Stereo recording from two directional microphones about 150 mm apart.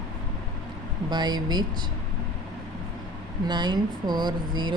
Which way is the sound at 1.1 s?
30° right (ahead or behind).